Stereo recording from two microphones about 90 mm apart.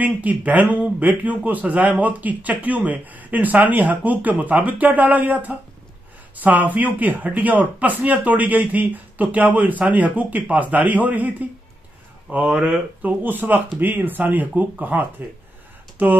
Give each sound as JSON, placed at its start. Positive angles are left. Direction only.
{"t": 0.0, "sound": "speech", "side_deg": -15}